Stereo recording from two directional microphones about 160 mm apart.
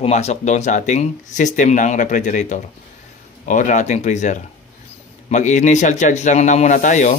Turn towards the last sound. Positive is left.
turn(degrees=55)  # may be behind; listen again after turning